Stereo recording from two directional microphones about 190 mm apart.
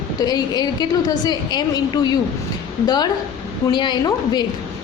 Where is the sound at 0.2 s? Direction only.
20° left (ahead or behind).